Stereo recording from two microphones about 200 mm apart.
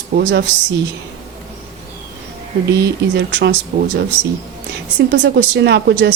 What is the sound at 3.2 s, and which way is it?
Speech, 60° right (ahead or behind).